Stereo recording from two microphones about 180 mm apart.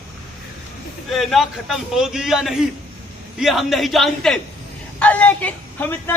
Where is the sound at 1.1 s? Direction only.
Centre (ahead or behind).